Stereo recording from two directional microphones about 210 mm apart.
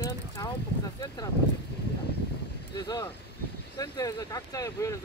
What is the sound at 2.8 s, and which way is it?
Speech, 20° left (ahead or behind).